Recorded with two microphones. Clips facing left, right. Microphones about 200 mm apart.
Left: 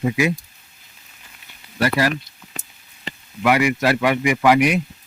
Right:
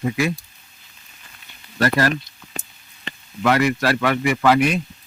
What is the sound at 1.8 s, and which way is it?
Speech, 10° left (ahead or behind).